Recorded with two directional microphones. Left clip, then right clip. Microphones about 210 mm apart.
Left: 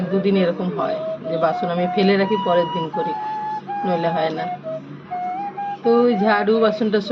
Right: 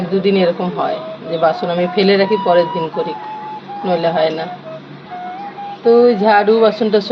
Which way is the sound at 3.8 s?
10° left (ahead or behind).